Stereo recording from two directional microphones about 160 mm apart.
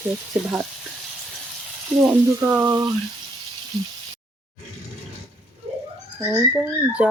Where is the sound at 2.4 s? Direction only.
15° right (ahead or behind).